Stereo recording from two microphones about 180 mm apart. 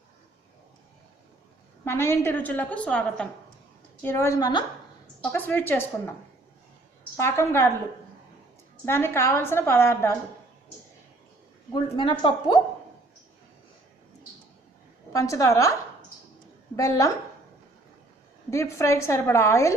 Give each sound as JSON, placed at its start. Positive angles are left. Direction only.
{"t": 1.8, "sound": "a woman's voice", "side_deg": 15}
{"t": 7.2, "sound": "a woman's voice", "side_deg": 15}
{"t": 8.8, "sound": "a woman's voice", "side_deg": 15}
{"t": 11.7, "sound": "a woman's voice", "side_deg": 30}
{"t": 15.1, "sound": "a woman's voice", "side_deg": 20}
{"t": 16.7, "sound": "a woman's voice", "side_deg": 20}
{"t": 18.5, "sound": "a woman's voice", "side_deg": 15}